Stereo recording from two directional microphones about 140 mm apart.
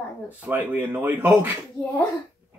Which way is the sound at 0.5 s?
10° right (ahead or behind).